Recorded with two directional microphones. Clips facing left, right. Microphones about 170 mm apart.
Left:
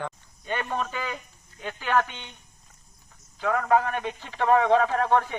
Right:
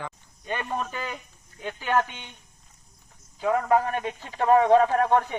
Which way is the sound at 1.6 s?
20° right (ahead or behind).